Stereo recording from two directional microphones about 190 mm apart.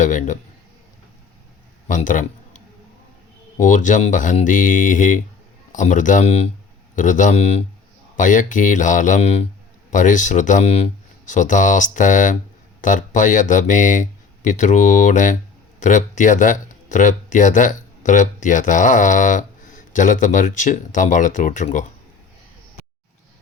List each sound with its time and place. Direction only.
0.0 s speech: 40° left (ahead or behind)
1.9 s a man's voice: 45° left (ahead or behind)
3.6 s speech: 40° left (ahead or behind)